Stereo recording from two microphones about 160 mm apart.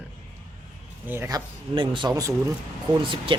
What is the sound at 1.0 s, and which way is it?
Speech, 15° right (ahead or behind).